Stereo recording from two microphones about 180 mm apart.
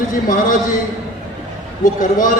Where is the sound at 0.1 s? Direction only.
50° left (ahead or behind).